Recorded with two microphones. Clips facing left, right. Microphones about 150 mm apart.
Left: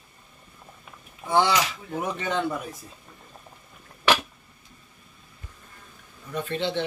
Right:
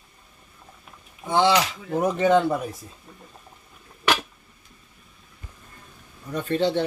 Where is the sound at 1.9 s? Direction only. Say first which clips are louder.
Right 11 dB; 40° right (ahead or behind).